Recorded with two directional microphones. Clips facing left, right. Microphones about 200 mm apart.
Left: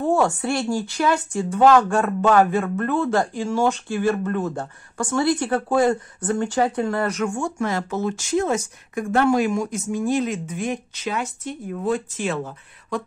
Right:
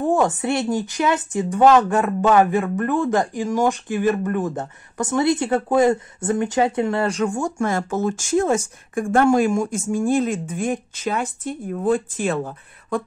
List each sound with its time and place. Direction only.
0.0 s speech: 15° right (ahead or behind); by 13.0 s 50° right (ahead or behind)